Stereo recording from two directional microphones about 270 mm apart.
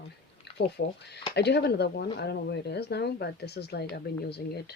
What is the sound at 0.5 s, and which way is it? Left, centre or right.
Speech, left.